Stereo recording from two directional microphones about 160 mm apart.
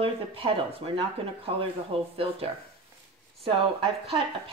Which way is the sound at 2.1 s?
35° right (ahead or behind).